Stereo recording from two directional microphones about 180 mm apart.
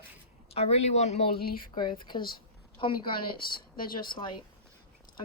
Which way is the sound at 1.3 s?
55° left (ahead or behind).